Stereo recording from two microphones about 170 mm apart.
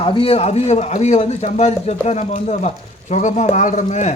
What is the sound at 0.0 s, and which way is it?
A man's voice, 30° left (ahead or behind).